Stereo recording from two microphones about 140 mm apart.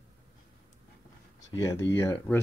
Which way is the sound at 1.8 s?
20° left (ahead or behind).